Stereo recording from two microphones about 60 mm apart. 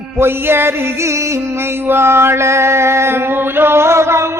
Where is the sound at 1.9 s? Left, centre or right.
Right.